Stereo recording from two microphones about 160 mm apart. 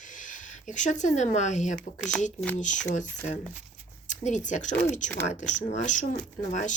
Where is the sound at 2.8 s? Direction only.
50° left (ahead or behind).